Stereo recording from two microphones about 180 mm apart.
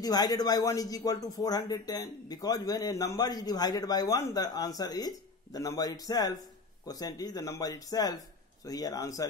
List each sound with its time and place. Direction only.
0.0 s a man's voice: 20° left (ahead or behind)